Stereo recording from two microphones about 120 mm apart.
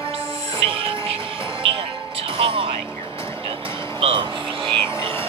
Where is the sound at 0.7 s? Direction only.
50° right (ahead or behind).